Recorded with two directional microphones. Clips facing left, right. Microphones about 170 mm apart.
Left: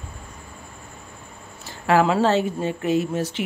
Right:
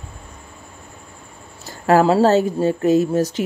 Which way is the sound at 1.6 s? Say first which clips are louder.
Right 4 dB; 40° right (ahead or behind).